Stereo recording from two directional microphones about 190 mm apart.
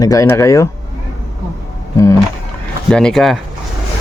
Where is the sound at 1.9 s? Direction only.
20° left (ahead or behind).